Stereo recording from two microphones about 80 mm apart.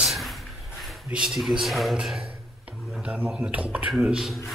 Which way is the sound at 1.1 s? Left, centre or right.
Centre.